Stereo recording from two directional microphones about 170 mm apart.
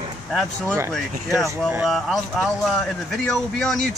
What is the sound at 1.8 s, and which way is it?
Speech, centre (ahead or behind).